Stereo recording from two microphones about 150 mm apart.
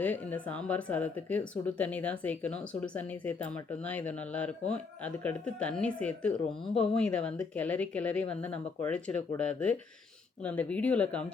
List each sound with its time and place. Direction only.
0.0 s speech: 10° left (ahead or behind)